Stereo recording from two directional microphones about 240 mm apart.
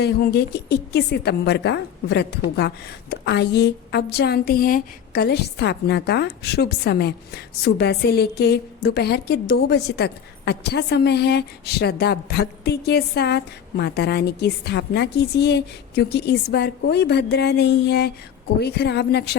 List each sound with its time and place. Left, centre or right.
0.0 s a woman's voice: left